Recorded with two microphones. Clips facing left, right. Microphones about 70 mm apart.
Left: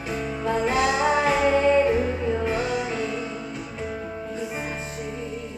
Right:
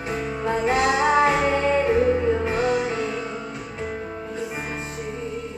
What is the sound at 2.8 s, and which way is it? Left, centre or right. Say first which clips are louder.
Music: right 2 dB; right.